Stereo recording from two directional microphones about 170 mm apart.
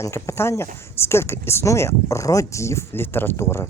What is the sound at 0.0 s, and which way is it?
Speech, 15° left (ahead or behind).